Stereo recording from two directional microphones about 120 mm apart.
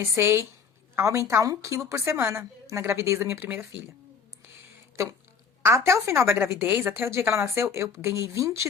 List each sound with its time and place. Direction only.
0.0 s a woman's voice: 20° right (ahead or behind)
5.6 s a woman's voice: 25° right (ahead or behind)